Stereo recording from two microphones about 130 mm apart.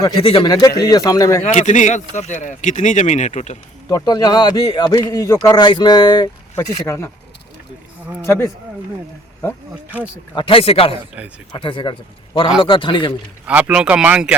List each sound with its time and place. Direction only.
0.2 s speech: 40° left (ahead or behind)
0.5 s speech: 30° left (ahead or behind)
1.5 s speech: 65° left (ahead or behind)
3.8 s a man's voice: 30° left (ahead or behind)
6.6 s speech: 20° left (ahead or behind)
8.2 s speech: 20° left (ahead or behind)
10.3 s a man's voice: 45° left (ahead or behind)
13.4 s speech: 10° right (ahead or behind)